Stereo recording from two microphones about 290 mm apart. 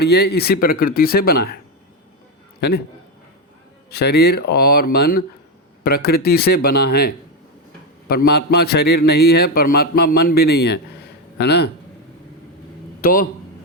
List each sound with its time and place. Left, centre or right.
0.0 s a man's voice: left
2.6 s a man's voice: left
3.8 s a man's voice: left
13.0 s a man's voice: left